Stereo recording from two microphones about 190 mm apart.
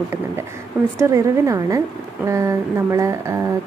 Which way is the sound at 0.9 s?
15° right (ahead or behind).